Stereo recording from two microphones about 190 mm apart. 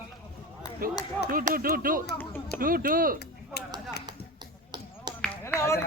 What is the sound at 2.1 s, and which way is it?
Speech, 10° left (ahead or behind).